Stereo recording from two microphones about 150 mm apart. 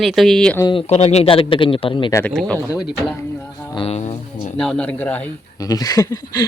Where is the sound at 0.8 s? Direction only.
45° left (ahead or behind).